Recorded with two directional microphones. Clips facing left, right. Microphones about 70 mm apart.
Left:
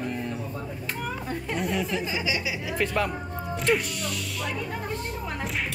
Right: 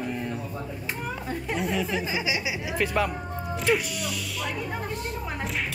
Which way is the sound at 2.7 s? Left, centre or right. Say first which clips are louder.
Right 1 dB; centre.